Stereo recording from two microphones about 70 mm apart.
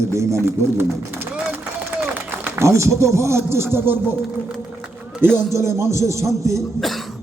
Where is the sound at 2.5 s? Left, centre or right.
Right.